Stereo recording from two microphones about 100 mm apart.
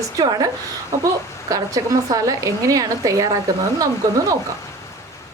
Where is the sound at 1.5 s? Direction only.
35° right (ahead or behind).